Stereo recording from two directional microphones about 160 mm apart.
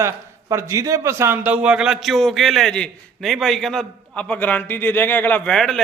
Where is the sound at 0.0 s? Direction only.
20° right (ahead or behind).